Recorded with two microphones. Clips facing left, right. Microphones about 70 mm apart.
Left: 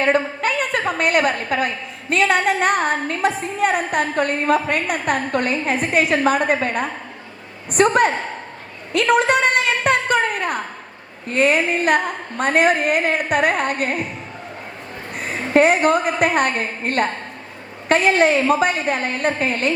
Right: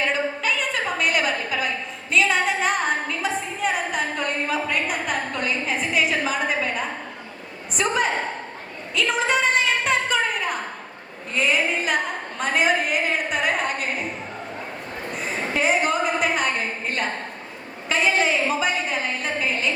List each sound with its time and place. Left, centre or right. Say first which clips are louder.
0.0 s a woman's voice: left 5 dB; left
8.9 s a sound: left 6 dB; left
11.3 s a woman's voice: left 5 dB; left
15.1 s a woman's voice: left 9 dB; left